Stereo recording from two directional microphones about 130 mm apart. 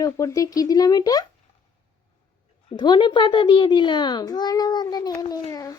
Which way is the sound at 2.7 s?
35° left (ahead or behind).